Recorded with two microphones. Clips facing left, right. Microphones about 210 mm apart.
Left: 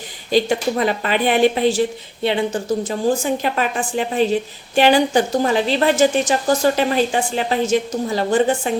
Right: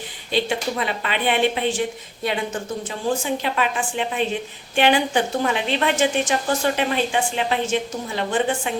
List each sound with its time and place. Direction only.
0.3 s a woman's voice: 40° left (ahead or behind)
3.4 s a woman's voice: 40° left (ahead or behind)